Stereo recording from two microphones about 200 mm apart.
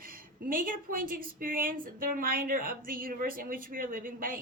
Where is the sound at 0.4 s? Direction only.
45° right (ahead or behind).